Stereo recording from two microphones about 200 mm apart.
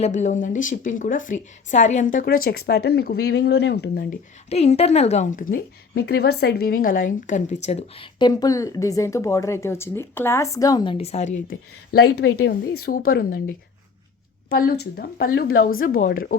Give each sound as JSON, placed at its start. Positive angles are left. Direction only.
{"t": 0.0, "sound": "a woman's voice", "side_deg": 35}
{"t": 4.4, "sound": "a woman's voice", "side_deg": 30}
{"t": 10.9, "sound": "a woman's voice", "side_deg": 30}
{"t": 13.1, "sound": "a woman's voice", "side_deg": 45}
{"t": 14.5, "sound": "a woman's voice", "side_deg": 50}